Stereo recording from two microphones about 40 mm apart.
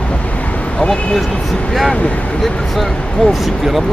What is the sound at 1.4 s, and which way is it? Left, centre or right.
Speech, centre.